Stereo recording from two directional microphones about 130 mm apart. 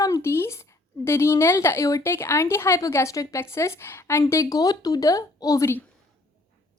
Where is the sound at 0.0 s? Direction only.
25° left (ahead or behind).